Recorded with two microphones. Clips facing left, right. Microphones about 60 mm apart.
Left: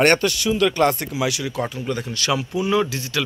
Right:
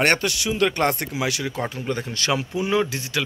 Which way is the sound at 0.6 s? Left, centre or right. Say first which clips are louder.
Left 2 dB; right.